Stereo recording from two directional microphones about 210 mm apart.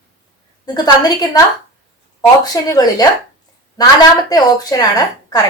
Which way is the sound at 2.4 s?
20° left (ahead or behind).